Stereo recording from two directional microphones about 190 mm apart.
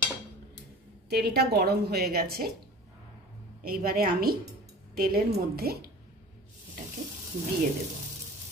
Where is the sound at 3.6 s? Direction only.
50° right (ahead or behind).